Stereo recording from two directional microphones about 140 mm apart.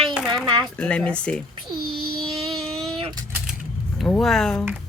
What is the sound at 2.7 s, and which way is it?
Vehicle, 45° right (ahead or behind).